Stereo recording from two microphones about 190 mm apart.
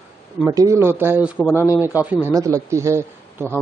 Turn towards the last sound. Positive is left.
turn(degrees=-15)  # may be behind; listen again after turning